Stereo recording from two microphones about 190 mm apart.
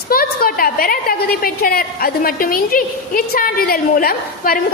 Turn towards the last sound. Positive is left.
turn(degrees=50)  # may be behind; listen again after turning